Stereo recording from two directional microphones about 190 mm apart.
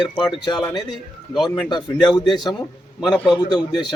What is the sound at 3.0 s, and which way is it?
Speech, centre (ahead or behind).